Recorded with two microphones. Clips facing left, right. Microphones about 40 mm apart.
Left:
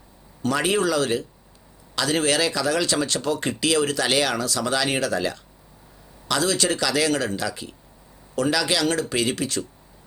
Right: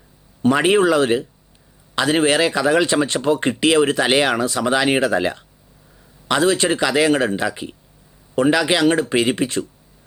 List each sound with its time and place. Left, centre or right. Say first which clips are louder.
0.4 s speech: right 7 dB; right